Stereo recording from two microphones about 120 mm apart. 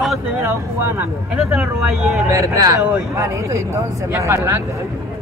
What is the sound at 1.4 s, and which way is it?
Speech, 10° right (ahead or behind).